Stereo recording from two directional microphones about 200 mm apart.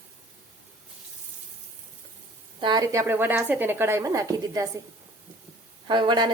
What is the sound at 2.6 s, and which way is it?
A woman's voice, 20° right (ahead or behind).